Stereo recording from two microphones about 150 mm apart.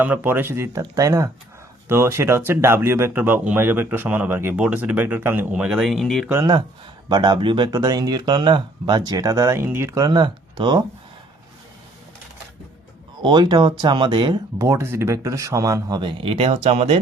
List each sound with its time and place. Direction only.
0.0 s speech: 15° right (ahead or behind)
6.2 s speech: 15° right (ahead or behind)
7.1 s speech: 30° right (ahead or behind)
13.2 s speech: 30° right (ahead or behind)
14.6 s speech: 15° right (ahead or behind); by 17.0 s 45° right (ahead or behind)